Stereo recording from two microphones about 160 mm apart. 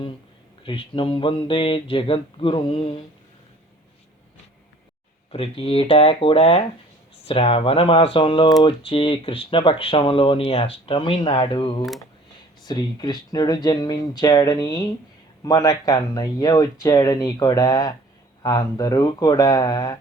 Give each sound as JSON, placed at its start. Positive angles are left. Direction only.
{"t": 0.6, "sound": "speech", "side_deg": 35}
{"t": 5.3, "sound": "speech", "side_deg": 35}